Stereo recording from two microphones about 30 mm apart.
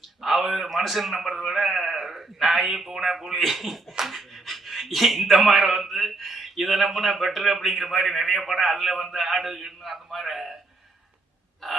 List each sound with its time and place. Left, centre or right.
0.2 s a man's voice: centre
11.6 s gasp: centre